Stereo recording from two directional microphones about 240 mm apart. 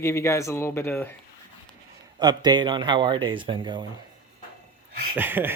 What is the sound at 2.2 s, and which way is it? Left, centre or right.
Speech, centre.